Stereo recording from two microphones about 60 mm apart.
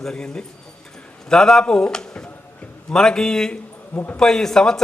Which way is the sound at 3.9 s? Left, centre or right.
Left.